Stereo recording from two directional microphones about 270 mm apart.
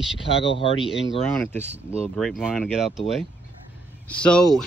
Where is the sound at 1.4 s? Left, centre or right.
Centre.